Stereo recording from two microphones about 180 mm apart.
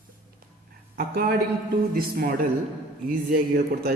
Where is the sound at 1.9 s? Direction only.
55° right (ahead or behind).